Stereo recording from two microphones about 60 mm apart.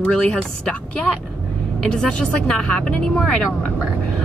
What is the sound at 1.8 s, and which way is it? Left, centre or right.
Speech, centre.